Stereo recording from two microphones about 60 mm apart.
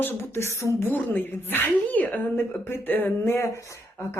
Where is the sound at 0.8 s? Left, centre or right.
Left.